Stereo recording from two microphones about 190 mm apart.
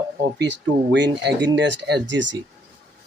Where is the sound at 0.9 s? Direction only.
65° right (ahead or behind).